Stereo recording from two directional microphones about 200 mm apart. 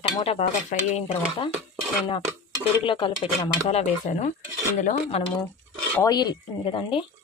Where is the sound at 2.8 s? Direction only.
25° left (ahead or behind).